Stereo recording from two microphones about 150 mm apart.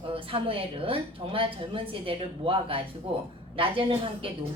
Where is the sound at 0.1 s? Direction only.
35° right (ahead or behind).